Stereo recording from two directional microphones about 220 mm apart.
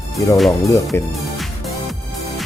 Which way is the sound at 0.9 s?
10° left (ahead or behind).